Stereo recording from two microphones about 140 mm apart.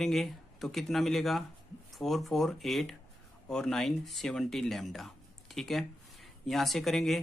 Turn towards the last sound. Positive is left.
turn(degrees=0)  # may be behind; listen again after turning